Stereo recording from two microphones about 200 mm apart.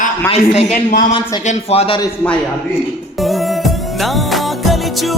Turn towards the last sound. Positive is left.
turn(degrees=0)  # may be behind; listen again after turning